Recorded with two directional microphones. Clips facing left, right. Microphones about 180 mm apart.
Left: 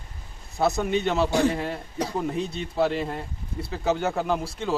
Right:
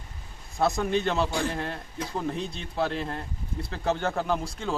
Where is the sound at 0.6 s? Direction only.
Centre (ahead or behind).